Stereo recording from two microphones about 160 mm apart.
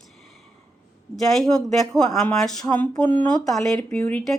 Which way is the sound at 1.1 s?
Centre (ahead or behind).